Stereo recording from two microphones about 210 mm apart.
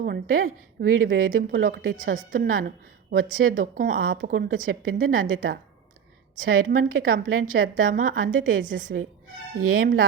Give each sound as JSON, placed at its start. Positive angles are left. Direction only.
{"t": 0.0, "sound": "a woman's voice", "side_deg": -45}
{"t": 3.9, "sound": "speech", "side_deg": -70}
{"t": 4.3, "sound": "a woman's voice", "side_deg": -40}